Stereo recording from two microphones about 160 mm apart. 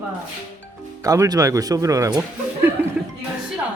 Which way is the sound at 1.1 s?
20° right (ahead or behind).